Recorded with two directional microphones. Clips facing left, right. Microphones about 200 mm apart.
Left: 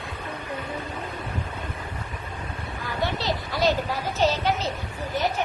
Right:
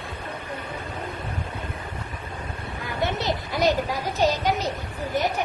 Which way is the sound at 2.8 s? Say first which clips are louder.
Right 1 dB; 20° right (ahead or behind).